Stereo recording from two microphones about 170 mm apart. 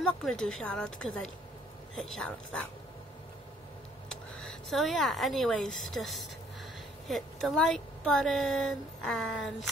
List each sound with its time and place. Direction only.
0.0 s speech: 5° left (ahead or behind)
4.1 s speech: 5° left (ahead or behind)